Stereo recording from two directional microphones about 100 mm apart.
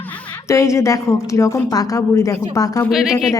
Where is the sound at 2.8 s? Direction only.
Centre (ahead or behind).